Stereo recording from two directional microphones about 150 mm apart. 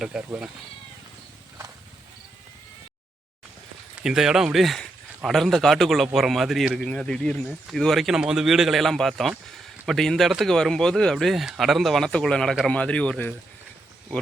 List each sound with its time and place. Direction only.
0.0 s speech: 5° right (ahead or behind)
4.0 s speech: 5° right (ahead or behind)